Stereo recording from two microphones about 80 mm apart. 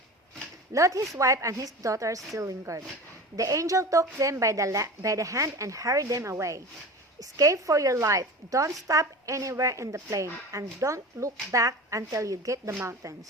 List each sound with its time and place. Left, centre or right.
0.7 s a woman's voice: right